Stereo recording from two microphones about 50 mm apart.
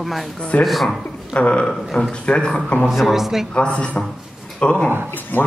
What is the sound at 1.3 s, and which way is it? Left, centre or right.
Speech, left.